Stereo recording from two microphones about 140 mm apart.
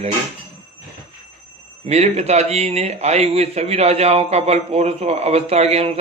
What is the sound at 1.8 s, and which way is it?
A man's voice, 50° right (ahead or behind).